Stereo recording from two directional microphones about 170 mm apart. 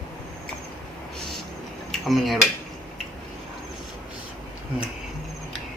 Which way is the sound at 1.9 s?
Centre (ahead or behind).